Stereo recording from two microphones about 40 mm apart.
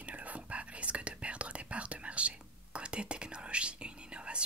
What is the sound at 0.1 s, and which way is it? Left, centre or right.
Whispering, right.